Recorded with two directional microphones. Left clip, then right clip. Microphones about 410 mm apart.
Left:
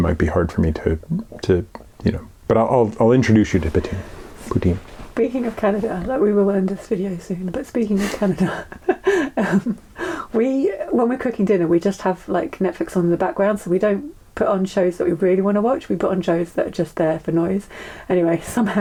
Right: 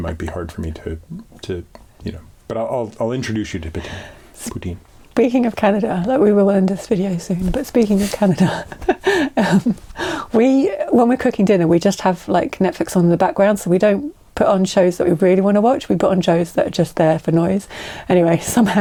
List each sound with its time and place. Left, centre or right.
0.1 s speech: centre
5.1 s speech: right